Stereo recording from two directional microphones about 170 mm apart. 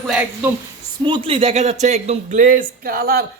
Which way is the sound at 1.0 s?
30° right (ahead or behind).